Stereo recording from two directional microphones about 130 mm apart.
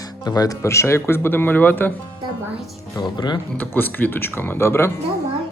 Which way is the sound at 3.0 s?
35° left (ahead or behind).